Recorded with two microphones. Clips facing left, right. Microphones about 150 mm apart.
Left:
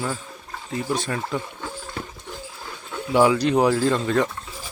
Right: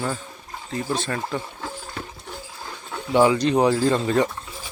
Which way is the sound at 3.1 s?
5° left (ahead or behind).